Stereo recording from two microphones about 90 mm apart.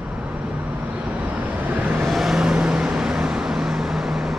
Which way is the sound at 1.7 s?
20° right (ahead or behind).